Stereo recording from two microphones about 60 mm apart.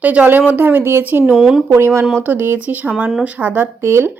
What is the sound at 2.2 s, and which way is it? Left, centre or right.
Speech, right.